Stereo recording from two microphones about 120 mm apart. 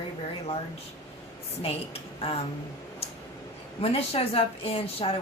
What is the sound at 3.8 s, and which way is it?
A woman's voice, 55° left (ahead or behind).